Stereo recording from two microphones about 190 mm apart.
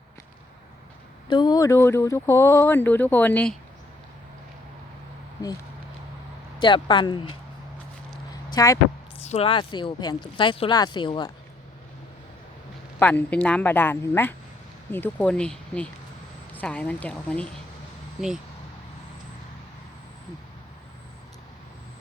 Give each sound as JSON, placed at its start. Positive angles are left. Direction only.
{"t": 1.3, "sound": "speech", "side_deg": 20}
{"t": 6.6, "sound": "speech", "side_deg": 25}
{"t": 8.4, "sound": "speech", "side_deg": 20}
{"t": 9.2, "sound": "speech", "side_deg": 30}
{"t": 13.0, "sound": "speech", "side_deg": 10}